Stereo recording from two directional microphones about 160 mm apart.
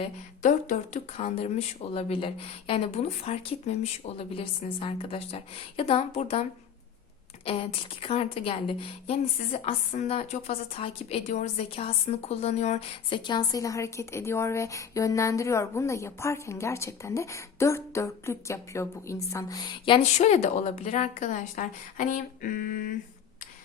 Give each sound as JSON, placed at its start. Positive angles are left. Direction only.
{"t": 0.4, "sound": "a woman's voice", "side_deg": 50}
{"t": 1.1, "sound": "a woman's voice", "side_deg": 40}
{"t": 7.4, "sound": "a woman's voice", "side_deg": 35}
{"t": 13.1, "sound": "a woman's voice", "side_deg": 30}
{"t": 20.1, "sound": "a woman's voice", "side_deg": 45}